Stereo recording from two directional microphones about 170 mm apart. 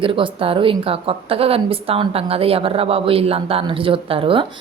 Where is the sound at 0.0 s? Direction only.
30° right (ahead or behind).